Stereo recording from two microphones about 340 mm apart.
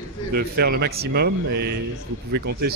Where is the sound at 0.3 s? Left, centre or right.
Right.